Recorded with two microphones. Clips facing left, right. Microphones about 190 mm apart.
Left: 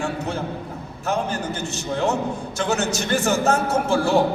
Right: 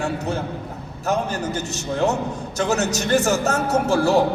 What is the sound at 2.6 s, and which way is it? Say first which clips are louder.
A man's voice: right 2 dB; 40° right (ahead or behind).